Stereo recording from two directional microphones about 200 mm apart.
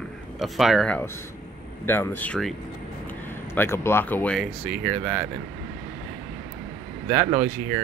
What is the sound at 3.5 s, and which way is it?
Speech, 10° left (ahead or behind).